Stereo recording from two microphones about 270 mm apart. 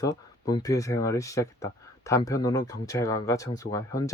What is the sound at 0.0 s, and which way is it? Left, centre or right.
Speech, centre.